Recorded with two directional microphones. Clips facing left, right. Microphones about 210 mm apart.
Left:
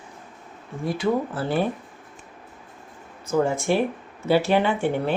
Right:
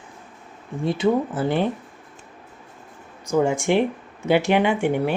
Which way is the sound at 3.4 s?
15° right (ahead or behind).